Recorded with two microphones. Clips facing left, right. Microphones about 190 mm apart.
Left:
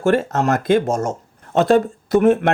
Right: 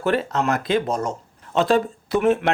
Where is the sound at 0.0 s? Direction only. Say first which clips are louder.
Left 4 dB; 45° left (ahead or behind).